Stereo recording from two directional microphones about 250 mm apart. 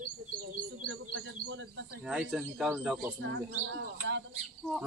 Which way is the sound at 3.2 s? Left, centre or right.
Right.